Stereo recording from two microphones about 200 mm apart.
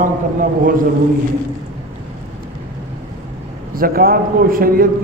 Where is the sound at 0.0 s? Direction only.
40° right (ahead or behind).